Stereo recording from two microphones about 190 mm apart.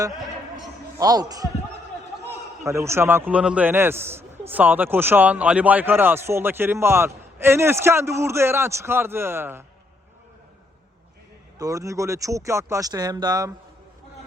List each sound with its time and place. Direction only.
0.9 s speech: 20° right (ahead or behind)
2.6 s a man's voice: 15° right (ahead or behind)
11.5 s a man's voice: 15° right (ahead or behind)